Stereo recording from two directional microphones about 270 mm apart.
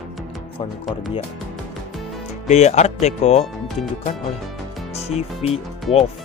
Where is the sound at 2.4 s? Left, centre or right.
Left.